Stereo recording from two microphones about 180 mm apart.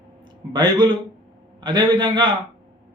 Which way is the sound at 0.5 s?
25° right (ahead or behind).